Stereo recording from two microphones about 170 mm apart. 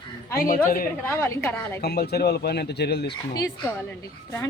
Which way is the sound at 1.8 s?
70° left (ahead or behind).